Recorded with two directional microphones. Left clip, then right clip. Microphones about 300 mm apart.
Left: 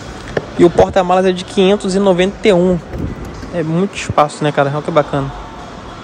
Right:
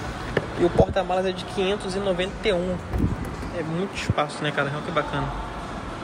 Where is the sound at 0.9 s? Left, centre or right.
Left.